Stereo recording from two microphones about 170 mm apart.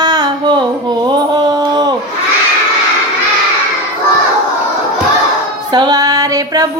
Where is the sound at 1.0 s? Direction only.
25° right (ahead or behind).